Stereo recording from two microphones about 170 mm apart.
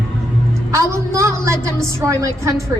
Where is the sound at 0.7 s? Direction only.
20° right (ahead or behind).